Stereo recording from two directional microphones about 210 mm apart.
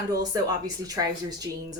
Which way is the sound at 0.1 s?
15° right (ahead or behind).